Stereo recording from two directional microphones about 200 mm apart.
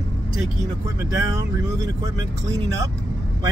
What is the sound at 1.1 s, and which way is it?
Speech, 15° right (ahead or behind).